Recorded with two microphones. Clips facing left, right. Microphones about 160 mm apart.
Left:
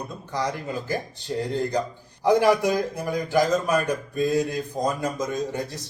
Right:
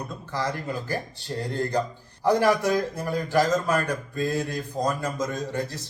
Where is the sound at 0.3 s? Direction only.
15° left (ahead or behind).